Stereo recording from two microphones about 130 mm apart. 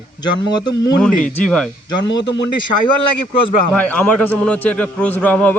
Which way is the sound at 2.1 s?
35° left (ahead or behind).